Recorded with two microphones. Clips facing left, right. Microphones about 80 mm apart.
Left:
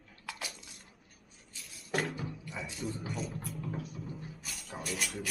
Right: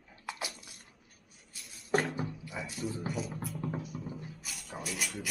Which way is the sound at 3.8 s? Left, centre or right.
Centre.